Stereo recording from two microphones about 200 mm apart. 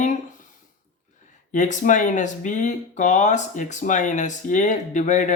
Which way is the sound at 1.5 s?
40° left (ahead or behind).